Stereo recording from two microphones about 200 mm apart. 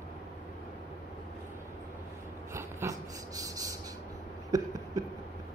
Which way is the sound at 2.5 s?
15° right (ahead or behind).